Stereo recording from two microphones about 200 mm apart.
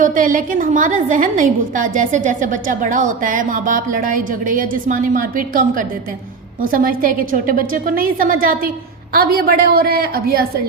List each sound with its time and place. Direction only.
0.0 s a woman's voice: 45° right (ahead or behind)